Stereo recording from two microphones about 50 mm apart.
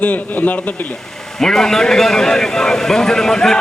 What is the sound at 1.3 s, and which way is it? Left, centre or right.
A man's voice, centre.